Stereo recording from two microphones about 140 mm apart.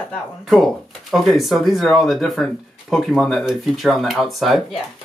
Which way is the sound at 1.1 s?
Centre (ahead or behind).